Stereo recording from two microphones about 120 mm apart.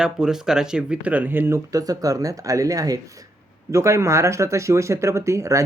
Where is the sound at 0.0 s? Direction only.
5° right (ahead or behind).